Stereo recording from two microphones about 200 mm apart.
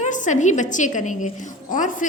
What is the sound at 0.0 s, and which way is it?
A woman's voice, 35° left (ahead or behind).